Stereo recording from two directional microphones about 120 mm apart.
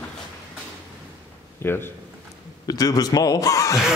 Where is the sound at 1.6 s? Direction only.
20° left (ahead or behind).